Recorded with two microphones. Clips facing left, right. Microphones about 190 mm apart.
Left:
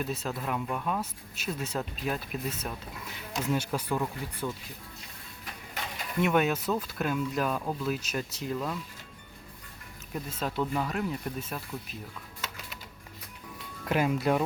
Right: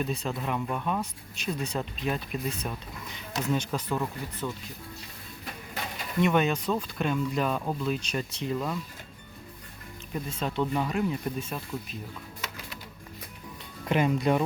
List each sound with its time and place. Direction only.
0.0 s speech: 5° left (ahead or behind)
6.1 s speech: 5° left (ahead or behind)
10.1 s speech: centre (ahead or behind)
13.8 s speech: 5° left (ahead or behind)